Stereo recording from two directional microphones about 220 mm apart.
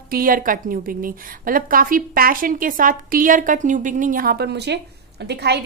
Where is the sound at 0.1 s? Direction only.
40° right (ahead or behind).